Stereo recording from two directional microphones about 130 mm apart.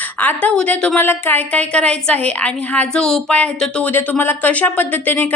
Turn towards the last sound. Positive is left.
turn(degrees=15)  # may be behind; listen again after turning